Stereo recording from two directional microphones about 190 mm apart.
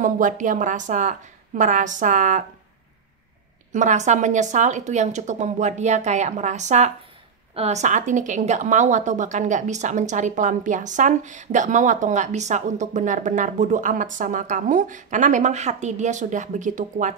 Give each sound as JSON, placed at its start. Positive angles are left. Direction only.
{"t": 0.0, "sound": "speech", "side_deg": -40}
{"t": 3.7, "sound": "speech", "side_deg": -40}